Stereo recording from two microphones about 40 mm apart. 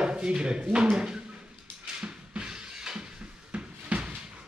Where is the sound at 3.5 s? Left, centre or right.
Right.